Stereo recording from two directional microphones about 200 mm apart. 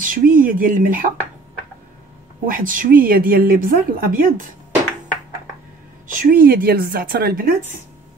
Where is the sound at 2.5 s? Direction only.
45° right (ahead or behind).